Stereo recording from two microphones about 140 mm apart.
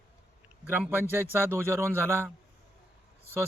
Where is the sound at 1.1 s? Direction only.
15° right (ahead or behind).